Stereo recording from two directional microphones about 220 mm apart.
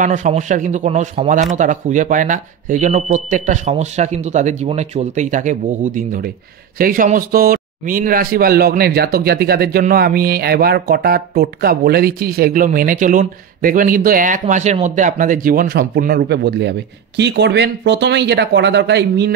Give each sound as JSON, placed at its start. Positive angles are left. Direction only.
{"t": 0.0, "sound": "a man's voice", "side_deg": -35}